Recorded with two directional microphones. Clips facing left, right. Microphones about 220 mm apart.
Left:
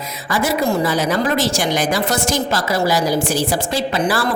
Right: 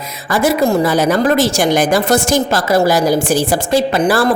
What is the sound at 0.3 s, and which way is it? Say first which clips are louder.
A woman's voice: right 5 dB; 50° right (ahead or behind).